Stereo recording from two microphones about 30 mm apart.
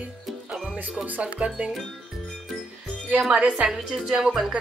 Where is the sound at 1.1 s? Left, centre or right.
Right.